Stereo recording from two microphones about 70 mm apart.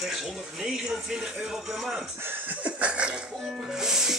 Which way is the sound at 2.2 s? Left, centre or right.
Right.